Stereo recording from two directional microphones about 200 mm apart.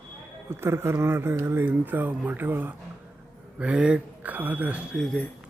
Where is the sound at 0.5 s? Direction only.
10° right (ahead or behind).